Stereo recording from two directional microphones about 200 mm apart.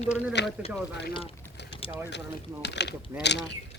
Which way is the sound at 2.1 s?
60° left (ahead or behind).